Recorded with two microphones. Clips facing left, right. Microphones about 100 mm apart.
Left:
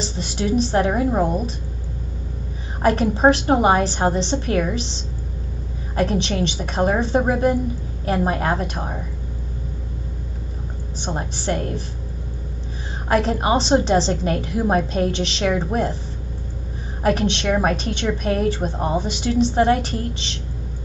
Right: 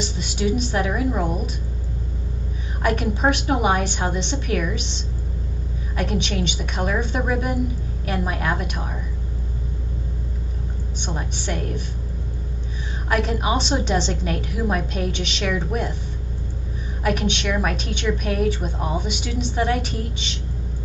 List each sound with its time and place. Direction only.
0.0 s a woman's voice: 35° left (ahead or behind)
2.8 s a woman's voice: 35° left (ahead or behind)
5.9 s a woman's voice: 35° left (ahead or behind)
11.0 s a woman's voice: 35° left (ahead or behind)
13.1 s a woman's voice: 35° left (ahead or behind)
17.0 s a woman's voice: 35° left (ahead or behind)